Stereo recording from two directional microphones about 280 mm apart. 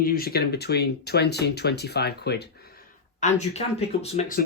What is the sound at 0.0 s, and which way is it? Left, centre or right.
Speech, left.